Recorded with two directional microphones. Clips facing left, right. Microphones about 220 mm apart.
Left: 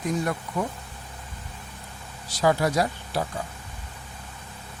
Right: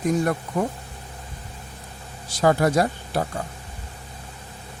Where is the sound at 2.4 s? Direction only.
50° right (ahead or behind).